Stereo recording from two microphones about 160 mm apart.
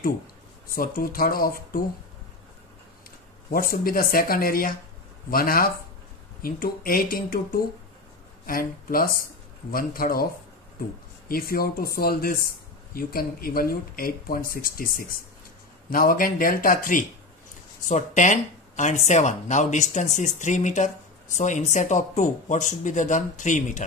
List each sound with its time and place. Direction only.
0.7 s speech: 65° left (ahead or behind)
3.7 s speech: 65° left (ahead or behind)
11.2 s speech: 65° left (ahead or behind); by 23.8 s 50° left (ahead or behind)